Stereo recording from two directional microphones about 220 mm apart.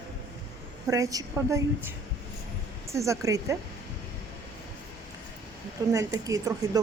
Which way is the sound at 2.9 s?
15° right (ahead or behind).